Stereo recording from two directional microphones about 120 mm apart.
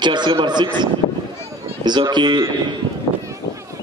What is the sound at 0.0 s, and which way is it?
Speech, 40° right (ahead or behind).